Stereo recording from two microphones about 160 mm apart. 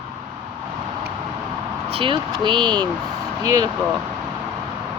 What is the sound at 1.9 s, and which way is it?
Speech, 35° right (ahead or behind).